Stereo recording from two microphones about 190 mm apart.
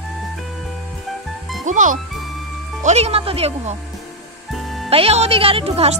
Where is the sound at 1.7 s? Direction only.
40° right (ahead or behind).